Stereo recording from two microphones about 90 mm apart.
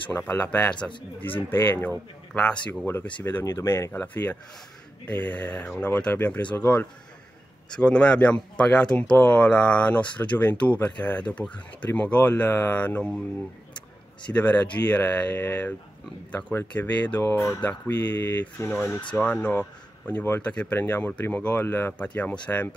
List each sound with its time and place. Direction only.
0.3 s speech: 20° left (ahead or behind)
1.5 s speech: 25° left (ahead or behind)
3.3 s speech: 30° left (ahead or behind)
3.9 s speech: 20° left (ahead or behind)
14.3 s speech: 20° left (ahead or behind)
17.2 s speech: 35° left (ahead or behind); by 22.8 s 15° left (ahead or behind)